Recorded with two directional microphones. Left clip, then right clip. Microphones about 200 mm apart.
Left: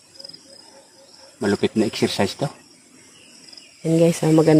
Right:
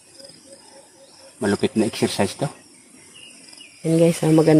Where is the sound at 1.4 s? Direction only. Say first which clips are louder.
Even; 10° right (ahead or behind).